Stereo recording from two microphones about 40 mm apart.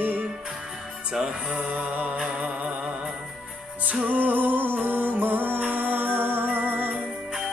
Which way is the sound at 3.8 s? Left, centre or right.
Right.